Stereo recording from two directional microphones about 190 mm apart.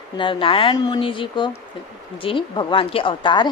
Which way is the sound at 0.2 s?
25° left (ahead or behind).